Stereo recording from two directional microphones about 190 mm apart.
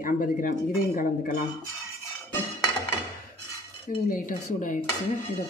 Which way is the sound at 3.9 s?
45° left (ahead or behind).